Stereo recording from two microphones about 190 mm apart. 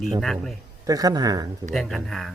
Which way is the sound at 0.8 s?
20° right (ahead or behind).